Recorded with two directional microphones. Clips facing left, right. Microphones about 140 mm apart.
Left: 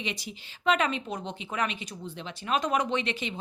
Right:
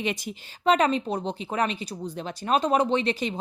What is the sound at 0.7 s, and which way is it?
Speech, 35° right (ahead or behind).